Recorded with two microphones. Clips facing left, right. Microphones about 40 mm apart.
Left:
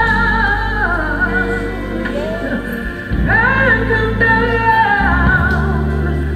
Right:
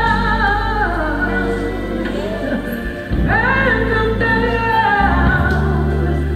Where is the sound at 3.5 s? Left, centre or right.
Centre.